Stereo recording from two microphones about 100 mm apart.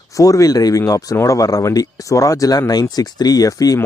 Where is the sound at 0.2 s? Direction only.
35° left (ahead or behind).